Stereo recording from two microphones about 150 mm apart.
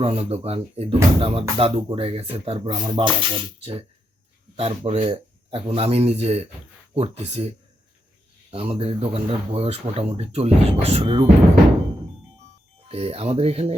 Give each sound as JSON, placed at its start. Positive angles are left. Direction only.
{"t": 0.0, "sound": "speech", "side_deg": -40}
{"t": 12.9, "sound": "speech", "side_deg": -40}